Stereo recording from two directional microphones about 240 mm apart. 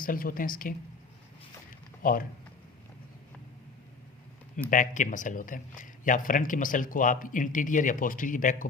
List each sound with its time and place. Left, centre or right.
0.0 s a man's voice: left
2.0 s speech: left
4.5 s a man's voice: left